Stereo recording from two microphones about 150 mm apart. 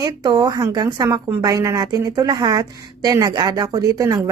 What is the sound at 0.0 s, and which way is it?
A woman's voice, 25° right (ahead or behind).